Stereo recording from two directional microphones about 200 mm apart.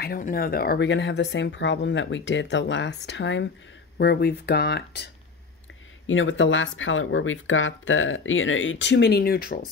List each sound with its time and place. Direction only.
0.0 s speech: 45° left (ahead or behind)
6.0 s speech: 75° left (ahead or behind); by 9.7 s 50° left (ahead or behind)